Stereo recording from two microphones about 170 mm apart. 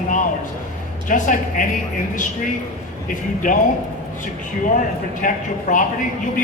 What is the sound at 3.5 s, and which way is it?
Speech, 50° left (ahead or behind).